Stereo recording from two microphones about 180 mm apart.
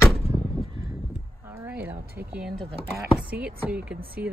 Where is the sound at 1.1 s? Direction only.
10° right (ahead or behind).